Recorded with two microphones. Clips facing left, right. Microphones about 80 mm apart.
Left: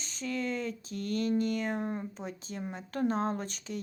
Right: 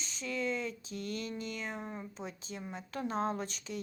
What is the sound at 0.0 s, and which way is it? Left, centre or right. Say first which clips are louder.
Speech: left 2 dB; left.